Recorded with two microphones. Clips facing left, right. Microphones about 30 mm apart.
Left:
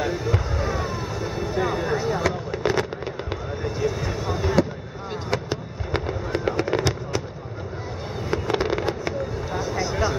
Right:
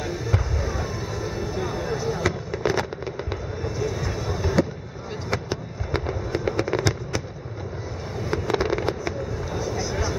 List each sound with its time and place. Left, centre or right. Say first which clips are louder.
0.1 s fireworks: left 3 dB; centre
0.6 s vehicle: left 3 dB; left
1.6 s a sound: left 5 dB; left
2.2 s fireworks: left 1 dB; centre
5.3 s fireworks: left 1 dB; centre
8.3 s fireworks: even; centre